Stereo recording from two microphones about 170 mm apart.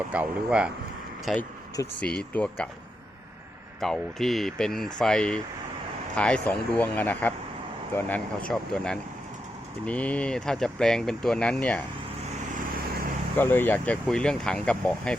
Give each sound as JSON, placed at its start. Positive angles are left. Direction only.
{"t": 0.1, "sound": "speech", "side_deg": -5}
{"t": 3.8, "sound": "speech", "side_deg": 0}
{"t": 13.3, "sound": "speech", "side_deg": 10}